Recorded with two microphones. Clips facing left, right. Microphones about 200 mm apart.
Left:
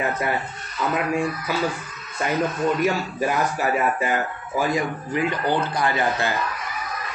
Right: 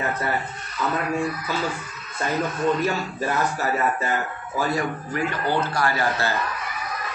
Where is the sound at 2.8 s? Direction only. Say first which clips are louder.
Left 3 dB; 10° left (ahead or behind).